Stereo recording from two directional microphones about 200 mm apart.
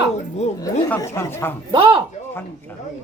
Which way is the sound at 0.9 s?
10° left (ahead or behind).